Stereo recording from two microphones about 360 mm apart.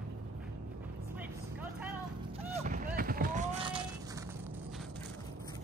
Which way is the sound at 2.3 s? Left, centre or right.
Centre.